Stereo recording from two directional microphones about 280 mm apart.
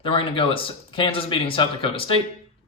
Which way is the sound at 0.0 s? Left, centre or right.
Centre.